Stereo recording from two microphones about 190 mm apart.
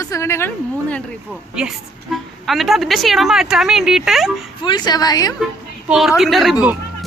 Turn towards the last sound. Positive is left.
turn(degrees=-5)  # may be behind; listen again after turning